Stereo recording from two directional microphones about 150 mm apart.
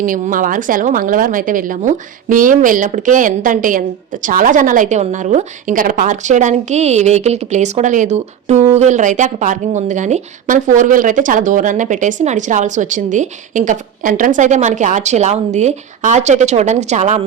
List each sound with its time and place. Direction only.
0.0 s speech: 65° right (ahead or behind)